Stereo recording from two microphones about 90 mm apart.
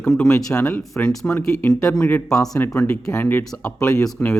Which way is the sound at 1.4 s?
20° left (ahead or behind).